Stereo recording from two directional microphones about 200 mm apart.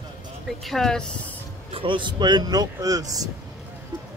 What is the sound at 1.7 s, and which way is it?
Speech, 25° right (ahead or behind).